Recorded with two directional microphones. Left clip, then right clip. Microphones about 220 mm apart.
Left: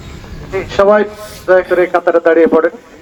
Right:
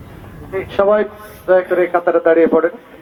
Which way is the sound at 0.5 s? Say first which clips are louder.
Left 4 dB; 25° right (ahead or behind).